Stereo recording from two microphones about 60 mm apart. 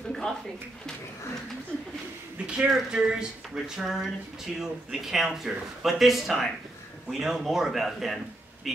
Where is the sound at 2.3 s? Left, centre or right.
Centre.